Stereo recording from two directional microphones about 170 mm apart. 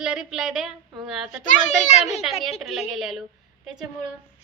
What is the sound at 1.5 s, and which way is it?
Speech, 45° left (ahead or behind).